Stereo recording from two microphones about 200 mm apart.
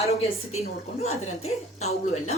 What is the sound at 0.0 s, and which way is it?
Speech, 30° left (ahead or behind).